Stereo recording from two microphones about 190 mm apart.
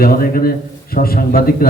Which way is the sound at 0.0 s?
50° left (ahead or behind).